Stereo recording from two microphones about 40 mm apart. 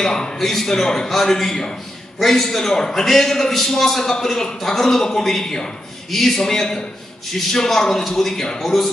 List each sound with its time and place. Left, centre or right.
0.0 s a man's voice: centre
0.4 s a man's voice: centre